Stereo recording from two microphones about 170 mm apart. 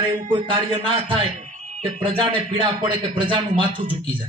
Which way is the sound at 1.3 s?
45° right (ahead or behind).